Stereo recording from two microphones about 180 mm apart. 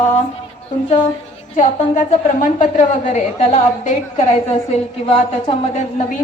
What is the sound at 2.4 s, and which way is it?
A woman's voice, 45° left (ahead or behind).